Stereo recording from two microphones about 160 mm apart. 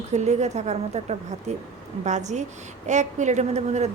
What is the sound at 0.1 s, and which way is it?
Speech, 45° right (ahead or behind).